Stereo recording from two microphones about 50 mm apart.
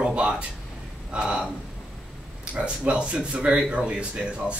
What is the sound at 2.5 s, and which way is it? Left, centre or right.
Speech, right.